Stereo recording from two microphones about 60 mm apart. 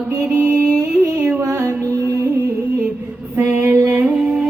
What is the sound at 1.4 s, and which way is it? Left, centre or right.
Music, right.